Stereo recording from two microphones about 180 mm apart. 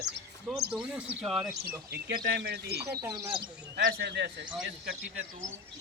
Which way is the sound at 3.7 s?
65° right (ahead or behind).